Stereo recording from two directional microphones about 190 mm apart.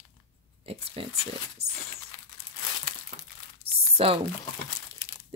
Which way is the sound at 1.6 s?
35° right (ahead or behind).